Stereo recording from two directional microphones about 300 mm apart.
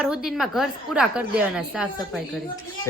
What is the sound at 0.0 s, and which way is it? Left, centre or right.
A woman's voice, centre.